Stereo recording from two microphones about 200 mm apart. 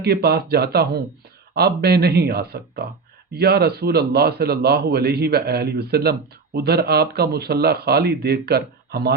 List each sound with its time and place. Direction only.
0.0 s a man's voice: 55° right (ahead or behind)